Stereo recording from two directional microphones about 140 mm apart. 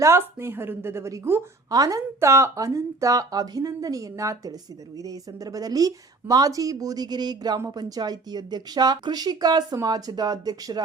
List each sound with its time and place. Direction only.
0.0 s a woman's voice: 20° right (ahead or behind)